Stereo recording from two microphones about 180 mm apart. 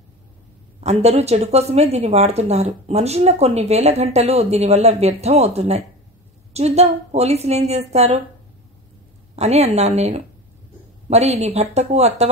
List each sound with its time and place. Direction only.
0.7 s a woman's voice: 35° right (ahead or behind)
9.3 s a woman's voice: 35° right (ahead or behind)